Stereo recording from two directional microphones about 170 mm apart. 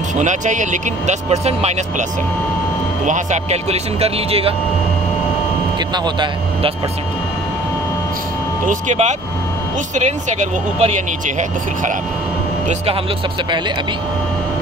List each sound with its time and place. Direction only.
0.2 s speech: 45° right (ahead or behind)
3.1 s speech: 45° right (ahead or behind)
6.0 s speech: 25° right (ahead or behind)
8.6 s speech: 45° right (ahead or behind)